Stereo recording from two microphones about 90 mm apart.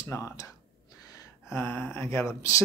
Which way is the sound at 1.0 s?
40° left (ahead or behind).